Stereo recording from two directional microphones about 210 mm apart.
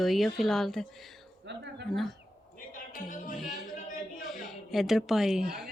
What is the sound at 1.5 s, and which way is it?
Speech, 55° right (ahead or behind).